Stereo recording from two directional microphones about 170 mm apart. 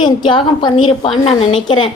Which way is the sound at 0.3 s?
30° left (ahead or behind).